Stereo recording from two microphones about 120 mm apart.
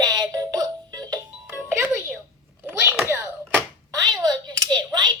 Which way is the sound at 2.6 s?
20° right (ahead or behind).